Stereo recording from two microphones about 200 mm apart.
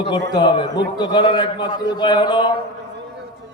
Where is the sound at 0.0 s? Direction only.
25° left (ahead or behind).